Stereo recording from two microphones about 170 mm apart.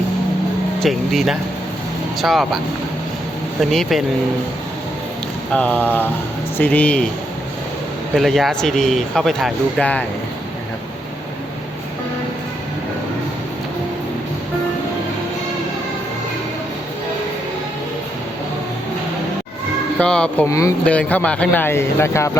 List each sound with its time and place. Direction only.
0.8 s speech: centre (ahead or behind)
3.6 s speech: centre (ahead or behind)
5.5 s speech: 5° left (ahead or behind)
8.1 s speech: centre (ahead or behind)
20.0 s speech: 5° left (ahead or behind)
20.5 s speech: 20° left (ahead or behind)
20.8 s speech: 5° left (ahead or behind)